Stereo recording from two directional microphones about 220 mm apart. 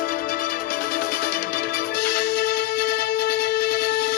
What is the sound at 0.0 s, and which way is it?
Music, 40° left (ahead or behind).